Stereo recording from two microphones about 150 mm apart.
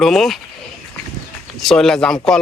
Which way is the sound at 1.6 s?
Centre (ahead or behind).